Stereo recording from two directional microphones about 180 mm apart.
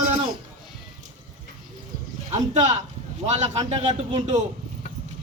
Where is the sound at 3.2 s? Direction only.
40° right (ahead or behind).